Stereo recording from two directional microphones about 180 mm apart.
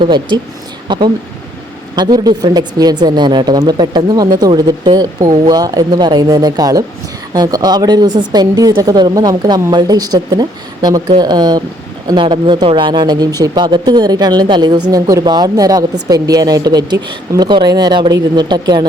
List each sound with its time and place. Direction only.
0.0 s speech: 25° right (ahead or behind)